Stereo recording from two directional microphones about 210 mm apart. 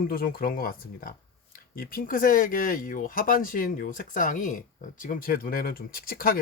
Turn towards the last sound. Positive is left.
turn(degrees=45)  # may be behind; listen again after turning